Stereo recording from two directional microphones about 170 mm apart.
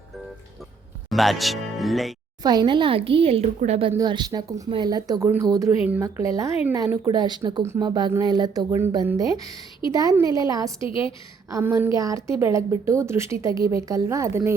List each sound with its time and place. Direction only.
1.1 s speech: centre (ahead or behind)
2.4 s speech: 25° right (ahead or behind)
3.9 s a woman's voice: 25° right (ahead or behind)
10.8 s a woman's voice: 30° left (ahead or behind)
11.5 s a woman's voice: 10° right (ahead or behind)